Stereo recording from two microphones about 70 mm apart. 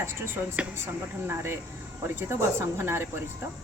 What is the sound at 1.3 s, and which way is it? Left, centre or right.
A woman's voice, right.